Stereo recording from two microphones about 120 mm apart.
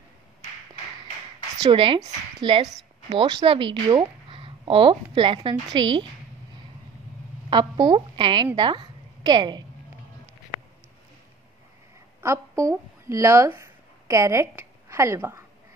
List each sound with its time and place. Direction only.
1.7 s speech: 45° right (ahead or behind)
3.1 s a woman's voice: 45° right (ahead or behind)
7.4 s a woman's voice: 40° right (ahead or behind)
12.2 s a woman's voice: 25° right (ahead or behind)